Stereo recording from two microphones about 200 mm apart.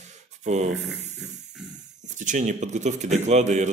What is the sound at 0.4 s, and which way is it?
Speech, 35° right (ahead or behind).